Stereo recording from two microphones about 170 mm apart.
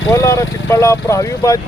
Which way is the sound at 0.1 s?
15° left (ahead or behind).